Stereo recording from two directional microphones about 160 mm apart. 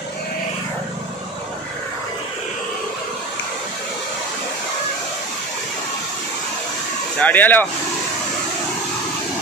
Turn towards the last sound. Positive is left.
turn(degrees=10)  # may be behind; listen again after turning